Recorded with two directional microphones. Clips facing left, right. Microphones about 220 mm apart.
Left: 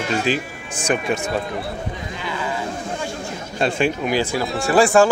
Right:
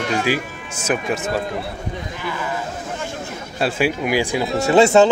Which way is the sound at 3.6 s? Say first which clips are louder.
Even; 5° right (ahead or behind).